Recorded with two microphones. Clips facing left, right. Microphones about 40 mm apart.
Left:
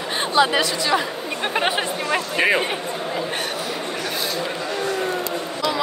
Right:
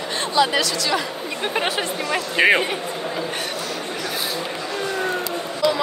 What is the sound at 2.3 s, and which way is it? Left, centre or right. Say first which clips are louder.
Speech: right 4 dB; right.